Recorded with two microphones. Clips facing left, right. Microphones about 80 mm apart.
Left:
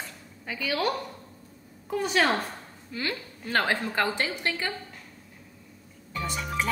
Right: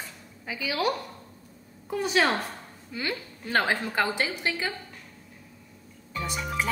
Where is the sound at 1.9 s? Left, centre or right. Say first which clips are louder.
Even; centre.